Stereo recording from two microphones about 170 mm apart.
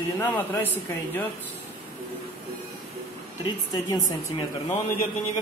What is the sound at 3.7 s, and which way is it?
A woman's voice, 30° left (ahead or behind).